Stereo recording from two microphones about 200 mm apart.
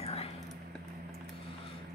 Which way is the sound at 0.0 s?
30° left (ahead or behind).